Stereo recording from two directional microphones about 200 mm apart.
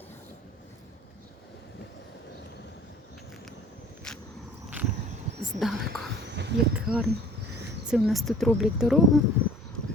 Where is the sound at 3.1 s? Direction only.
Centre (ahead or behind).